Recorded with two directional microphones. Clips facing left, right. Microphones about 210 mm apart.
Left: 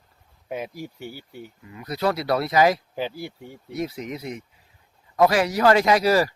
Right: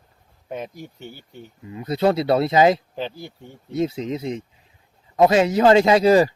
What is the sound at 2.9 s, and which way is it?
Speech, 10° left (ahead or behind).